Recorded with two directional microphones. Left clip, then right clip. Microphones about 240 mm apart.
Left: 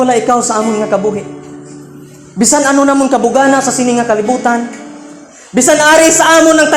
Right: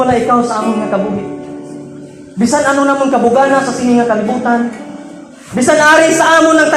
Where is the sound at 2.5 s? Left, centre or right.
Left.